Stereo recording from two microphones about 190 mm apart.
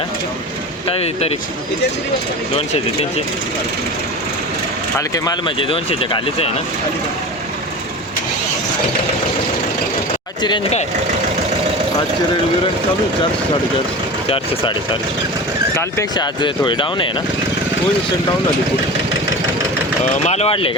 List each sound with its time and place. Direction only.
0.9 s speech: 35° left (ahead or behind)
4.9 s speech: 20° left (ahead or behind)
10.4 s speech: 25° left (ahead or behind)
14.3 s speech: 30° left (ahead or behind)
15.7 s speech: 15° left (ahead or behind)
20.2 s speech: 35° left (ahead or behind)